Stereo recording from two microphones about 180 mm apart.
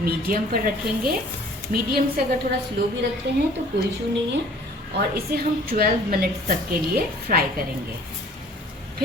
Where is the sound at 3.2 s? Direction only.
70° right (ahead or behind).